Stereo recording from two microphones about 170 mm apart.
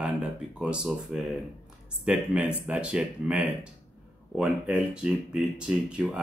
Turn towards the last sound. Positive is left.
turn(degrees=-5)  # may be behind; listen again after turning